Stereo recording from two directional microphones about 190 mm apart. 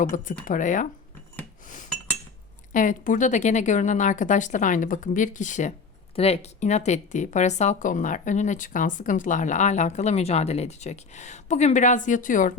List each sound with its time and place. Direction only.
0.0 s speech: 45° left (ahead or behind)
1.6 s chink: 45° left (ahead or behind)
2.7 s speech: 45° left (ahead or behind)